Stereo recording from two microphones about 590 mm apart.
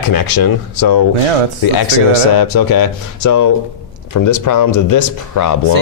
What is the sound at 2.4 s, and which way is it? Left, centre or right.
Speech, left.